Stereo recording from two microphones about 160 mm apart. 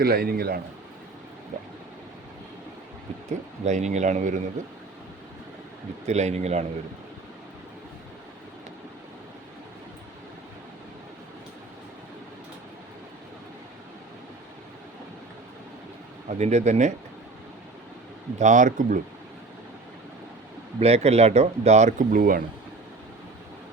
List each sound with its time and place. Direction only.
0.0 s a man's voice: 70° right (ahead or behind)
3.2 s speech: 45° right (ahead or behind)
6.1 s speech: 45° right (ahead or behind)
16.3 s speech: 45° right (ahead or behind)
18.3 s speech: 50° right (ahead or behind)
20.7 s speech: 40° right (ahead or behind); by 22.4 s 60° right (ahead or behind)